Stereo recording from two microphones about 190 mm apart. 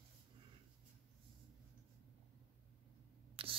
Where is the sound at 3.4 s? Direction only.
30° right (ahead or behind).